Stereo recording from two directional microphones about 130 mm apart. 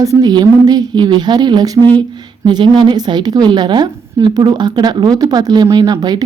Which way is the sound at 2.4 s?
35° right (ahead or behind).